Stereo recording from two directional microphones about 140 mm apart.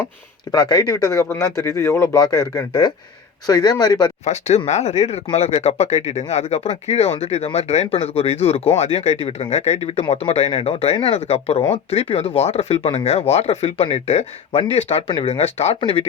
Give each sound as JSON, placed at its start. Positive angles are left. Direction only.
{"t": 0.5, "sound": "speech", "side_deg": 25}
{"t": 4.3, "sound": "speech", "side_deg": 50}